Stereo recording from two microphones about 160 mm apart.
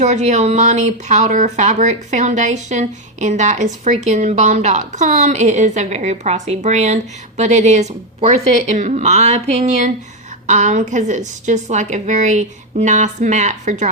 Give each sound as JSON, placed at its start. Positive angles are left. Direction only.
{"t": 0.0, "sound": "speech", "side_deg": -45}